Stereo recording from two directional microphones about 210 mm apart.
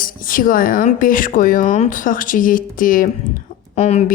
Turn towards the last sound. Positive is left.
turn(degrees=30)  # may be behind; listen again after turning